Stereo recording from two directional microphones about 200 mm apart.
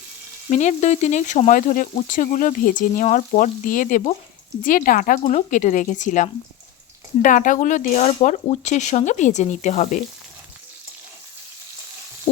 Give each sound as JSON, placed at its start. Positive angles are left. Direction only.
{"t": 0.5, "sound": "speech", "side_deg": 35}